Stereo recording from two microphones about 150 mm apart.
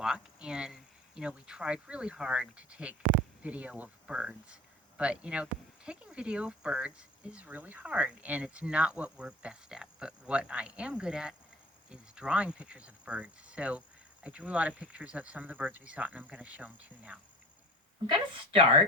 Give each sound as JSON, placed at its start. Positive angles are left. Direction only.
{"t": 0.0, "sound": "speech", "side_deg": -5}
{"t": 18.0, "sound": "speech", "side_deg": -35}